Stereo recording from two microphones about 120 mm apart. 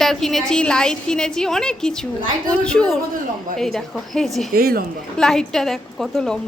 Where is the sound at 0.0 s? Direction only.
5° left (ahead or behind).